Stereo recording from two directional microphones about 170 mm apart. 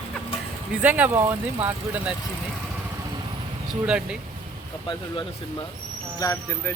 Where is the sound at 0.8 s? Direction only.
10° right (ahead or behind).